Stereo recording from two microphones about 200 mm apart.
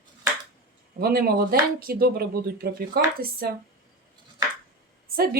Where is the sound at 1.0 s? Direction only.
50° right (ahead or behind).